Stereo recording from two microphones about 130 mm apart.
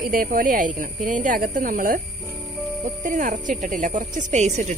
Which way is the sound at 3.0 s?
85° right.